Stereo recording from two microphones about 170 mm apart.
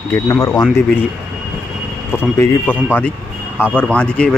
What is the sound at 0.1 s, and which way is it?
Speech, 15° left (ahead or behind).